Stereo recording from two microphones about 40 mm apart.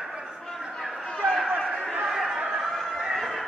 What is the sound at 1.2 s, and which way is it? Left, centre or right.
Chatter, centre.